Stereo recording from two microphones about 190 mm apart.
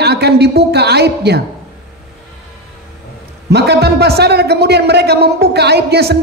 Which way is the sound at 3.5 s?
60° right (ahead or behind).